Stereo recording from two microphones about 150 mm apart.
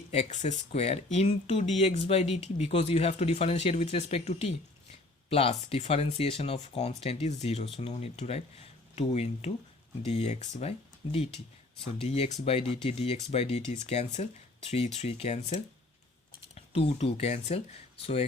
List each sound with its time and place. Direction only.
0.1 s speech: 50° left (ahead or behind)